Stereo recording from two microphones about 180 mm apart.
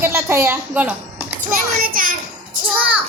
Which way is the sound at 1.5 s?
50° right (ahead or behind).